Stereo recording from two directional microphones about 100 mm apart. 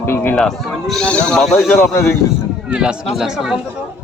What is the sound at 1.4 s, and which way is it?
Speech, centre (ahead or behind).